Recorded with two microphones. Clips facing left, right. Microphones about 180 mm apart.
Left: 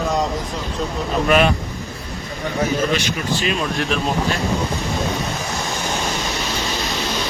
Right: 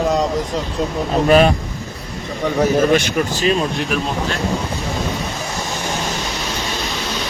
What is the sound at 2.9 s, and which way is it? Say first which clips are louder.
Speech: right 5 dB; 50° right (ahead or behind).